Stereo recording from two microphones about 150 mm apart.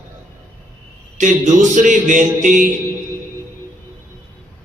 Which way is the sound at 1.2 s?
55° right (ahead or behind).